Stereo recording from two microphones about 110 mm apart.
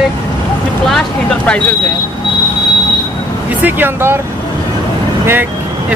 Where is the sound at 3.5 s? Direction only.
15° right (ahead or behind).